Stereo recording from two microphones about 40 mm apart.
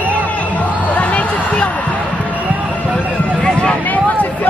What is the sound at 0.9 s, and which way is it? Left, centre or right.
Speech, left.